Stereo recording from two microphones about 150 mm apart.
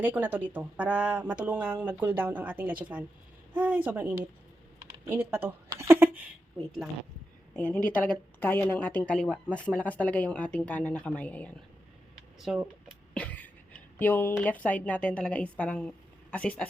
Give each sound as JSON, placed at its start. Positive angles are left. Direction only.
{"t": 0.0, "sound": "speech", "side_deg": -10}
{"t": 5.6, "sound": "a sound", "side_deg": -20}
{"t": 7.5, "sound": "a woman's voice", "side_deg": 5}
{"t": 12.4, "sound": "speech", "side_deg": 0}
{"t": 13.1, "sound": "speech", "side_deg": 10}